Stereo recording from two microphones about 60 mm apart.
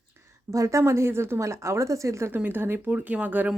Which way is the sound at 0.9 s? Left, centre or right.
Right.